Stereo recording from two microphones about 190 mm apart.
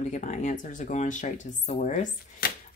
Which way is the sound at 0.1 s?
40° left (ahead or behind).